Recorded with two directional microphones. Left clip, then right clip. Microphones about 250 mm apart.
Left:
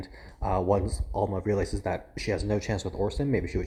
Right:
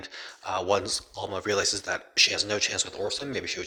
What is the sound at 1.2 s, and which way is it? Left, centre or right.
Speech, right.